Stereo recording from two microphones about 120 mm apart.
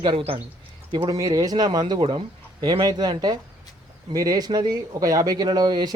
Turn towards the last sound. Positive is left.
turn(degrees=-35)  # may be behind; listen again after turning